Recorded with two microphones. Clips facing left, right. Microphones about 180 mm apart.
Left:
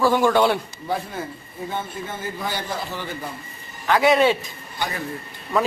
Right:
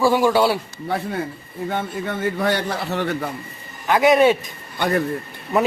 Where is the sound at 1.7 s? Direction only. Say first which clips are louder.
Right 5 dB; 70° right (ahead or behind).